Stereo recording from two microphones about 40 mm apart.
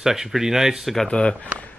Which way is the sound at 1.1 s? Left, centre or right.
Left.